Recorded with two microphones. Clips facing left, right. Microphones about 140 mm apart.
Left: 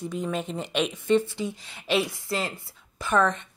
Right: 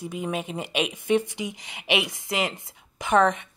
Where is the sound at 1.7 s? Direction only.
70° right (ahead or behind).